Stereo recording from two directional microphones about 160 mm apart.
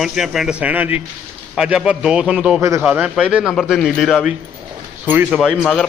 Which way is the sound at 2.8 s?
5° right (ahead or behind).